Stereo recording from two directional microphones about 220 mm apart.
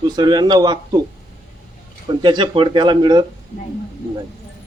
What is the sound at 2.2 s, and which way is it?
Speech, 20° right (ahead or behind).